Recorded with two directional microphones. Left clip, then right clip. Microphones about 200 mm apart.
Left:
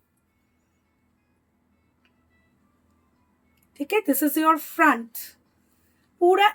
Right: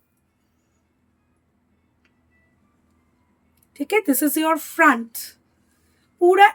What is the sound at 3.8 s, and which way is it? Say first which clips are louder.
A woman's voice: right 3 dB; 25° right (ahead or behind).